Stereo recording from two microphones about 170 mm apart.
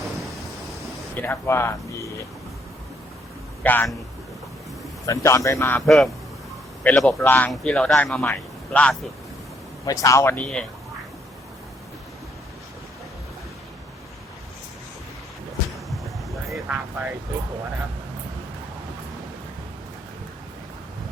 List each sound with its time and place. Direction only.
0.0 s thunder: centre (ahead or behind)
1.1 s a man's voice: 10° left (ahead or behind)
3.6 s a man's voice: 10° left (ahead or behind)
5.0 s a man's voice: 20° left (ahead or behind)
5.8 s a man's voice: centre (ahead or behind)
9.8 s a man's voice: 20° left (ahead or behind)
16.5 s a sound: 5° right (ahead or behind)